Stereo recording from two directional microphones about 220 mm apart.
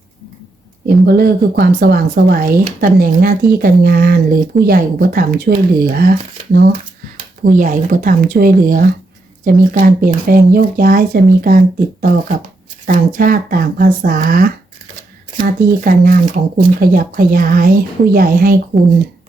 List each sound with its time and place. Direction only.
1.0 s speech: 45° right (ahead or behind)